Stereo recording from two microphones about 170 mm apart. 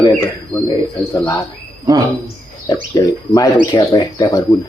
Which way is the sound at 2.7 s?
20° left (ahead or behind).